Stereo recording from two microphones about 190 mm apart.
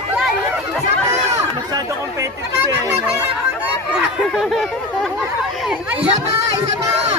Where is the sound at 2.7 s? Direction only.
15° right (ahead or behind).